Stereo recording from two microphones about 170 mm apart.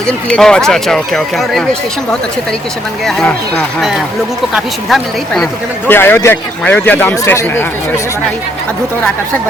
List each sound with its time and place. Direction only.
0.1 s speech: 5° left (ahead or behind)
3.0 s speech: centre (ahead or behind)
4.5 s speech: centre (ahead or behind)
5.9 s a man's voice: 15° left (ahead or behind)